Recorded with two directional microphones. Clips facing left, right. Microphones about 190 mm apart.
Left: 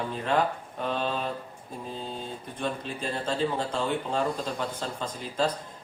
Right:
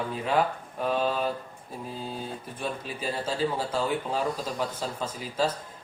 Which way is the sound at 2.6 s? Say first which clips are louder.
Left 1 dB; 5° right (ahead or behind).